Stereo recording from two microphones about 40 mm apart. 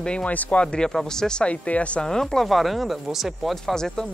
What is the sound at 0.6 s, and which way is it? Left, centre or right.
Speech, left.